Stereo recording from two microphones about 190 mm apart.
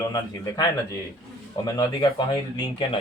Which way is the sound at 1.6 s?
20° left (ahead or behind).